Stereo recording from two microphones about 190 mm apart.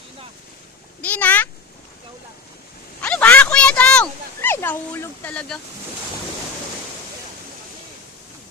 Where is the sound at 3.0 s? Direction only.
5° left (ahead or behind).